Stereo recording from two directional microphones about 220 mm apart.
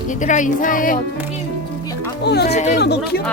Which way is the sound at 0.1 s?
35° left (ahead or behind).